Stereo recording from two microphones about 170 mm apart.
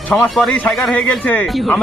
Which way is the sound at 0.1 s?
Centre (ahead or behind).